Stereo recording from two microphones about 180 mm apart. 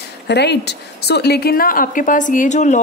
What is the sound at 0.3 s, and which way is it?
A woman's voice, 70° left (ahead or behind).